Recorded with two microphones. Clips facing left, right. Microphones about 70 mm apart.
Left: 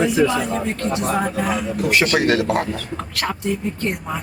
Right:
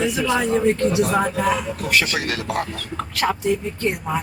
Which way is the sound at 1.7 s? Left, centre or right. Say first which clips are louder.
Left 4 dB; left.